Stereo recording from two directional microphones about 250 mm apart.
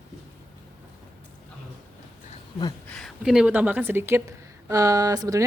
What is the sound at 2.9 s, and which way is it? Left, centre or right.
A woman's voice, centre.